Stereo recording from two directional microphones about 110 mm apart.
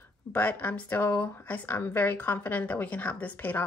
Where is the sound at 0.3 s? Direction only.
15° left (ahead or behind).